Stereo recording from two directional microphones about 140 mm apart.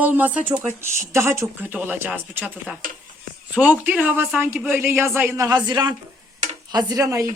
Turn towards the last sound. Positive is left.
turn(degrees=-20)  # may be behind; listen again after turning